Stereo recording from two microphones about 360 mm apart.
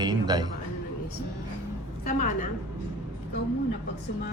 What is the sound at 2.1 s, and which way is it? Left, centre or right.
Speech, left.